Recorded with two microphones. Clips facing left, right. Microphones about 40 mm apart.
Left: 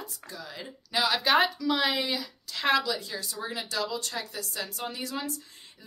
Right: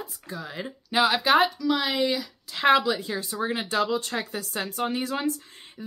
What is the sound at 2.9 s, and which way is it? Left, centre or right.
A woman's voice, right.